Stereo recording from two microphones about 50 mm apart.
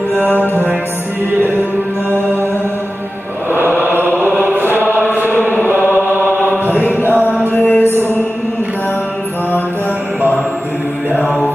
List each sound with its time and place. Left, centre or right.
0.3 s music: left
3.5 s mantra: right
4.4 s chant: right
5.8 s chant: left
7.4 s a sound: left
11.2 s music: centre